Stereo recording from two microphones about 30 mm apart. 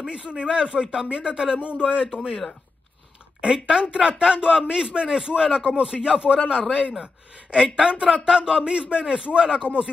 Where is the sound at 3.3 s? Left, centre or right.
Right.